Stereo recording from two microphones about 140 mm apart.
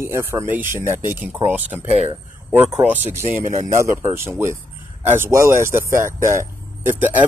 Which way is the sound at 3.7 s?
20° right (ahead or behind).